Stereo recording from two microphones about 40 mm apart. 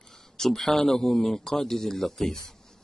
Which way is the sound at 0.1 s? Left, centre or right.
Centre.